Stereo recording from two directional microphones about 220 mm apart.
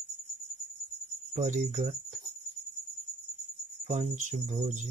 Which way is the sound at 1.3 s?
30° right (ahead or behind).